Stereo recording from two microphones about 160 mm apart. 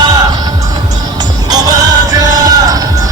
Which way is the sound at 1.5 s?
25° right (ahead or behind).